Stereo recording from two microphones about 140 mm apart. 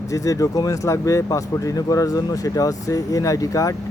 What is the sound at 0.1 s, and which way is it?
Speech, 25° left (ahead or behind).